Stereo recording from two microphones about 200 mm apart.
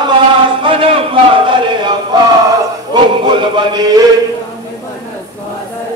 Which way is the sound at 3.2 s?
25° right (ahead or behind).